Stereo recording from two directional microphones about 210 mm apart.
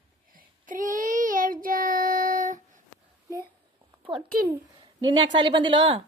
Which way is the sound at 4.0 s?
25° right (ahead or behind).